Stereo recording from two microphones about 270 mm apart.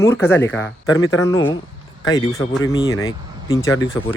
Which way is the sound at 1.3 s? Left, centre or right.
Centre.